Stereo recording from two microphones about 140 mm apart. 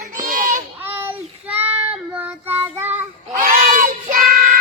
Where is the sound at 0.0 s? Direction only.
75° right (ahead or behind).